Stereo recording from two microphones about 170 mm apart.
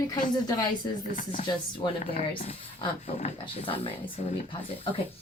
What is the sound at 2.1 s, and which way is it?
Speech, 35° left (ahead or behind).